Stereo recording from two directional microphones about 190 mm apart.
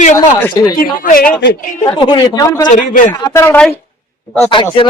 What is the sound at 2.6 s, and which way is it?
Speech, 40° left (ahead or behind).